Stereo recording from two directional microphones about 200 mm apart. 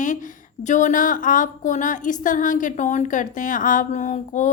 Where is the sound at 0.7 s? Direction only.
40° left (ahead or behind).